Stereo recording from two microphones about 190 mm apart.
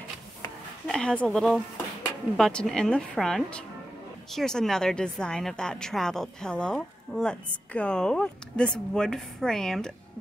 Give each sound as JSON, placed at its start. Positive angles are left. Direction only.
{"t": 0.8, "sound": "a woman's voice", "side_deg": 5}